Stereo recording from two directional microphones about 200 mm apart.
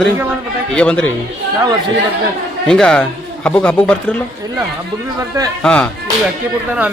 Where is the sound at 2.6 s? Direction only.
5° left (ahead or behind).